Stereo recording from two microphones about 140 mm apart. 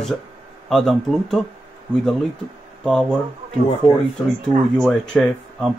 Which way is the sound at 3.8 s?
45° left (ahead or behind).